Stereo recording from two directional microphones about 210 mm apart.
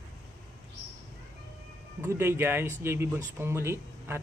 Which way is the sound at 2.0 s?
10° right (ahead or behind).